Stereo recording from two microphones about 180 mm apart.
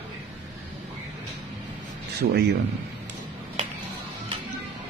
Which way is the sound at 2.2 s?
55° right (ahead or behind).